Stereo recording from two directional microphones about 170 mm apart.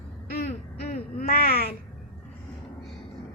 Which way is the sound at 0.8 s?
60° left (ahead or behind).